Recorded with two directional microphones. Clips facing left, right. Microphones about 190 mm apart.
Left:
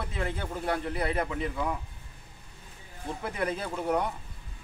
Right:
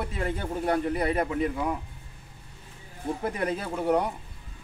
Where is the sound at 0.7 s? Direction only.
40° right (ahead or behind).